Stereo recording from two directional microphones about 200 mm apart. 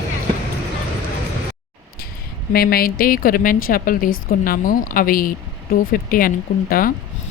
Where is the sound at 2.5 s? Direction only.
50° left (ahead or behind).